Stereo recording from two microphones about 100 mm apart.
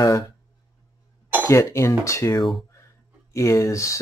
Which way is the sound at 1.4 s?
25° left (ahead or behind).